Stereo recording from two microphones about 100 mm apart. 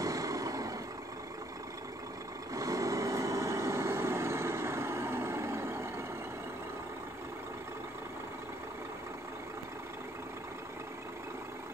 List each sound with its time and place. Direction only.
0.0 s vehicle: 35° right (ahead or behind)
2.5 s vehicle: 35° right (ahead or behind)